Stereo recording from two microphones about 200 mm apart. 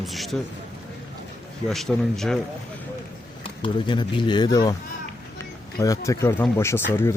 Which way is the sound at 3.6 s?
25° left (ahead or behind).